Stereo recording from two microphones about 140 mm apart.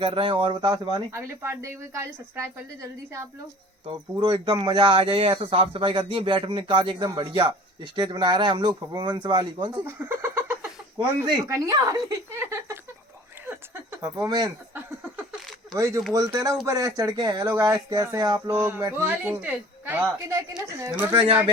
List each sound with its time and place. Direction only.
0.0 s speech: 40° right (ahead or behind)
1.1 s speech: 20° right (ahead or behind)
4.2 s speech: 35° right (ahead or behind)
9.8 s a sound: 15° right (ahead or behind)
10.9 s speech: 25° right (ahead or behind)
14.3 s speech: 30° right (ahead or behind)
16.1 s a man's voice: 25° right (ahead or behind)